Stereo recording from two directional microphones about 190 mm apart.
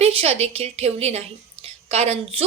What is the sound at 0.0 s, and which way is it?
A woman's voice, 30° right (ahead or behind).